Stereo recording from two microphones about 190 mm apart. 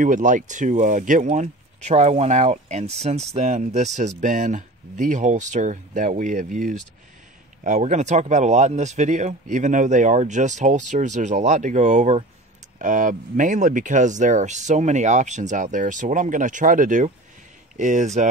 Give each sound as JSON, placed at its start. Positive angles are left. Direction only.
{"t": 0.0, "sound": "speech", "side_deg": -45}